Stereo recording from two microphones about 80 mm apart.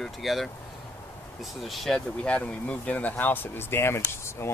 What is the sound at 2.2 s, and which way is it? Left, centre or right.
Speech, centre.